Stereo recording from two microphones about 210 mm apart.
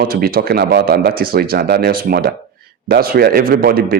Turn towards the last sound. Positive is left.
turn(degrees=-45)  # may be behind; listen again after turning